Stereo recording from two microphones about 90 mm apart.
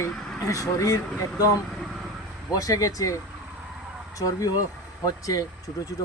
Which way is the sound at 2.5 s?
40° left (ahead or behind).